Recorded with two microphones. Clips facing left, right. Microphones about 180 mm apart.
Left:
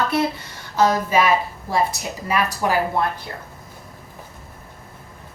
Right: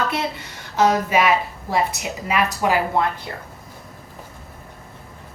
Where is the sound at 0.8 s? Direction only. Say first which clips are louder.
Even; 20° right (ahead or behind).